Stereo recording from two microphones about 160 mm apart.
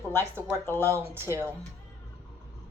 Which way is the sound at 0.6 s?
15° left (ahead or behind).